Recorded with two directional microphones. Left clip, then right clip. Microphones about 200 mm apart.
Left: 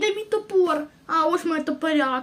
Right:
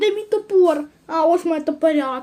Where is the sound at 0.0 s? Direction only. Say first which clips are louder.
Right 4 dB; 10° right (ahead or behind).